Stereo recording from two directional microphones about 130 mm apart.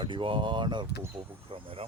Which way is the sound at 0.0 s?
40° right (ahead or behind).